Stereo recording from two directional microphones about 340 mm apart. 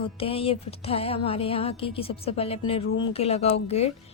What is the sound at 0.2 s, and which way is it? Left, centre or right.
A woman's voice, centre.